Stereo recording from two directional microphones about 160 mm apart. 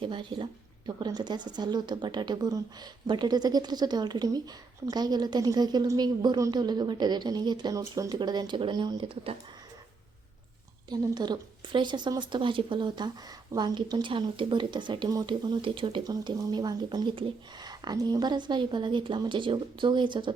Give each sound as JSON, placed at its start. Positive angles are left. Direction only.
{"t": 0.0, "sound": "a woman's voice", "side_deg": -30}
{"t": 10.8, "sound": "speech", "side_deg": -25}